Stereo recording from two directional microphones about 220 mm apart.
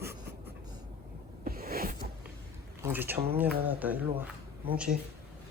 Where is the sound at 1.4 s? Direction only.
40° right (ahead or behind).